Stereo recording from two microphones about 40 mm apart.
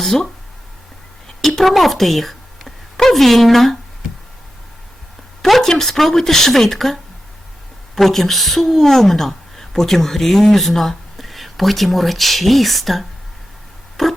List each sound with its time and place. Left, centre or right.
1.4 s a woman's voice: centre
5.4 s a woman's voice: centre
14.0 s clock: centre